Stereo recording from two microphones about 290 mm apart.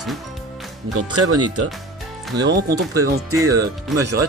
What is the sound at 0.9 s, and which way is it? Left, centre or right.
Speech, right.